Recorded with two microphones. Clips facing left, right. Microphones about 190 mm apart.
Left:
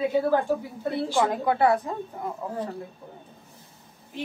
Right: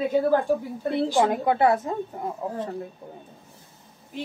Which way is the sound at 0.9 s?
20° right (ahead or behind).